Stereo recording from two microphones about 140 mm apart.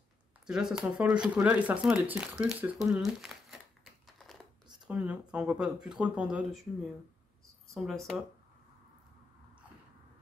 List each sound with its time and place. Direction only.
0.5 s speech: 5° right (ahead or behind)